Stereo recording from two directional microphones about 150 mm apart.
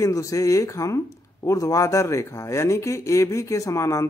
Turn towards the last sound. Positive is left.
turn(degrees=20)  # may be behind; listen again after turning